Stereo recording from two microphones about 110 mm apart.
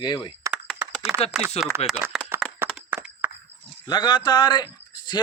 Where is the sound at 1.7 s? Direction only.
20° right (ahead or behind).